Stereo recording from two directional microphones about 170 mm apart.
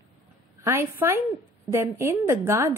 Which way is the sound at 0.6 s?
15° right (ahead or behind).